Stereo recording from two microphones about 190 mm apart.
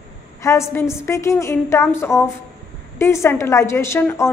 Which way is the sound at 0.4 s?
15° left (ahead or behind).